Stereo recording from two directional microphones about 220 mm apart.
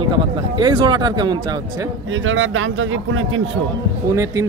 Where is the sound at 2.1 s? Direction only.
65° right (ahead or behind).